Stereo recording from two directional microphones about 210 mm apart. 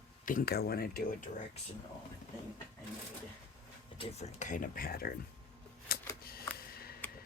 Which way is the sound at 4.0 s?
35° left (ahead or behind).